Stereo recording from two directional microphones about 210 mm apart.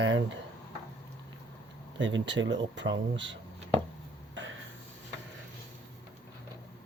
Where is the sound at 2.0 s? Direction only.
60° right (ahead or behind).